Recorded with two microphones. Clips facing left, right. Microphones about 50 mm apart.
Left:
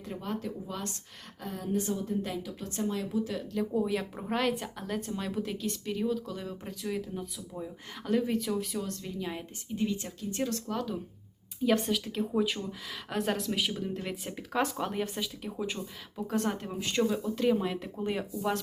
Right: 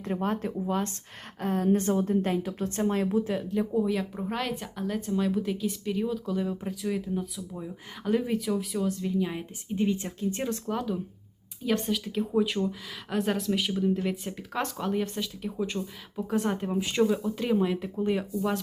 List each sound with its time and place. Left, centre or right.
0.1 s a woman's voice: right
1.4 s a woman's voice: right
3.7 s speech: centre
9.7 s speech: right; by 11.0 s centre
11.6 s speech: centre